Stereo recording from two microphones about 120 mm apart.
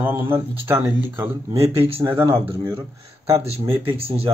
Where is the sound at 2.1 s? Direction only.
20° right (ahead or behind).